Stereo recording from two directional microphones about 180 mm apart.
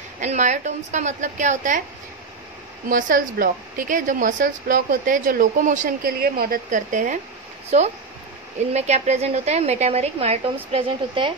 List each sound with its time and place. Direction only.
0.2 s a woman's voice: 40° right (ahead or behind)
2.9 s a woman's voice: 50° right (ahead or behind)
8.7 s a woman's voice: 40° right (ahead or behind)